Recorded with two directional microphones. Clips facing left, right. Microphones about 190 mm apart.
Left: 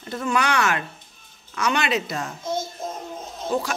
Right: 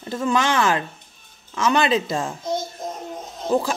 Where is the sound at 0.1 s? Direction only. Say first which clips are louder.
Right 2 dB; 25° right (ahead or behind).